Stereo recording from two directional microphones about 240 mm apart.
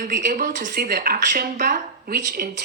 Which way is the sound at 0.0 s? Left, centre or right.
Right.